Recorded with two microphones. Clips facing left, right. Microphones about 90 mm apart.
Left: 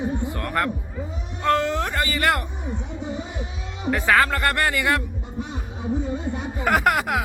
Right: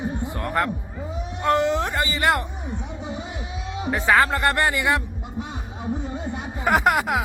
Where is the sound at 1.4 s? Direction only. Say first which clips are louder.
Right 1 dB; 20° right (ahead or behind).